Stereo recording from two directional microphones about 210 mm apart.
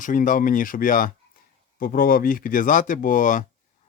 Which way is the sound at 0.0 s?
40° left (ahead or behind).